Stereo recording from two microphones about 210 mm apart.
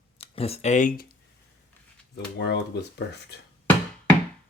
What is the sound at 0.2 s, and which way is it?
Speech, 30° left (ahead or behind).